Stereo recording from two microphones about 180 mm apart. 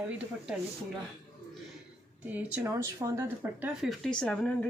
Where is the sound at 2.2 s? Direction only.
10° right (ahead or behind); by 4.7 s 5° left (ahead or behind).